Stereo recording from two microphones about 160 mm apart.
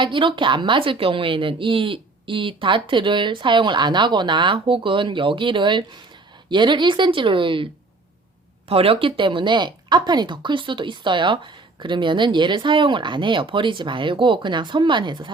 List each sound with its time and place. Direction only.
0.0 s a woman's voice: 30° right (ahead or behind)
8.7 s speech: 35° right (ahead or behind)